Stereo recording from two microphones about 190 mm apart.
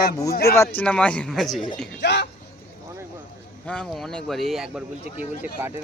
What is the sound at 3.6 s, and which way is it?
Speech, 5° left (ahead or behind).